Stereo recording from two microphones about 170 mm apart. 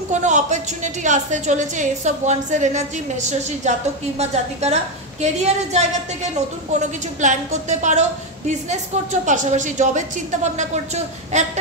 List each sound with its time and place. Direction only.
0.1 s a woman's voice: 45° right (ahead or behind)